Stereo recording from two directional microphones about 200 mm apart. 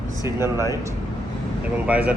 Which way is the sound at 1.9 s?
10° right (ahead or behind).